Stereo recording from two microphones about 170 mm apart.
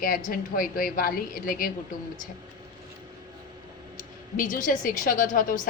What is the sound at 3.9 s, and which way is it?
A woman's voice, 55° left (ahead or behind).